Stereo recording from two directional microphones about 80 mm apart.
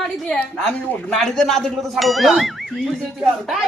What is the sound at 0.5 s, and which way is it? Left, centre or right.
Speech, centre.